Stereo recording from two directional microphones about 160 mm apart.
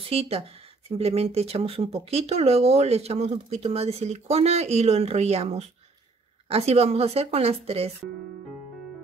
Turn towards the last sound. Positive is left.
turn(degrees=-40)  # may be behind; listen again after turning